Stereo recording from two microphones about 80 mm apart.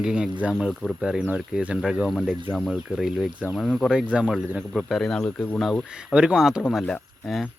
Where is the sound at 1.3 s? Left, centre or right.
Centre.